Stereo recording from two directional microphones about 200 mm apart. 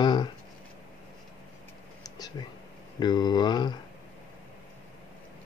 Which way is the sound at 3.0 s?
20° left (ahead or behind).